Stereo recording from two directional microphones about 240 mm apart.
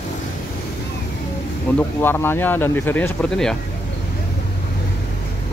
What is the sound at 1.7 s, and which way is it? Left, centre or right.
Speech, centre.